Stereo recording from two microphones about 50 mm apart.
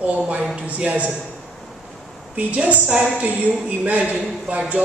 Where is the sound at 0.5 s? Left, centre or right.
Right.